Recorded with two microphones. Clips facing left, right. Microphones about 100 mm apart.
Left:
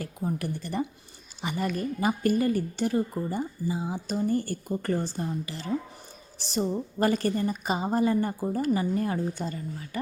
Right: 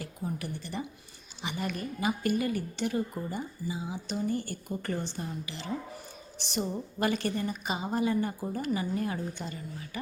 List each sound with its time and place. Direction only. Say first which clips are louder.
0.0 s a woman's voice: left 5 dB; 45° left (ahead or behind)